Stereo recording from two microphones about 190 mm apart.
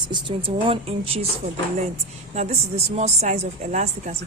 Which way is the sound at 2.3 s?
35° right (ahead or behind).